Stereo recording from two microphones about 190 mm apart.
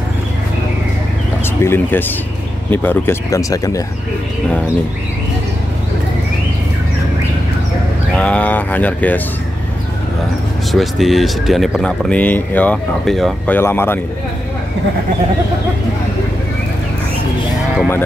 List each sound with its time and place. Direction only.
1.4 s speech: 10° left (ahead or behind)
8.2 s speech: 5° left (ahead or behind)
10.7 s speech: centre (ahead or behind)
13.6 s speech: 10° left (ahead or behind)